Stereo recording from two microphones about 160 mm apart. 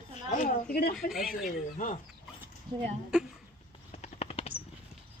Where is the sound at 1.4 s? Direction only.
55° left (ahead or behind).